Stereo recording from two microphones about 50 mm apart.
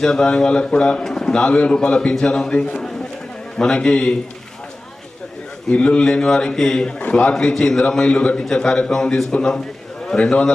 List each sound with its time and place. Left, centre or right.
0.0 s a man's voice: centre
5.7 s a man's voice: left
7.1 s a man's voice: left
7.3 s a man's voice: centre
7.9 s a man's voice: centre
8.9 s a man's voice: centre